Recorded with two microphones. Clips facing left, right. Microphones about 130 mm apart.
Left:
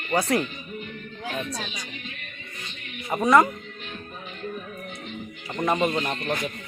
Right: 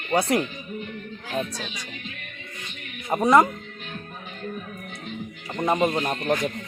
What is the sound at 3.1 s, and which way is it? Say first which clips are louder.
Speech: right 1 dB; 25° right (ahead or behind).